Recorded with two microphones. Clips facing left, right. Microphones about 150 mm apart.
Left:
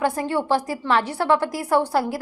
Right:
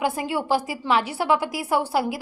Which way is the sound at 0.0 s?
5° right (ahead or behind).